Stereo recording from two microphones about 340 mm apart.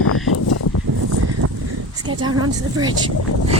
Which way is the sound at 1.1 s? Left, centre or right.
Right.